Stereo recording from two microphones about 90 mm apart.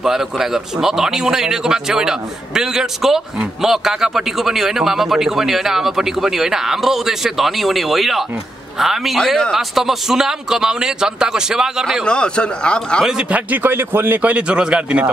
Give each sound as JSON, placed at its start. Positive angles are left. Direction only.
{"t": 0.0, "sound": "speech", "side_deg": -5}
{"t": 12.0, "sound": "a man's voice", "side_deg": 10}
{"t": 13.0, "sound": "a man's voice", "side_deg": -15}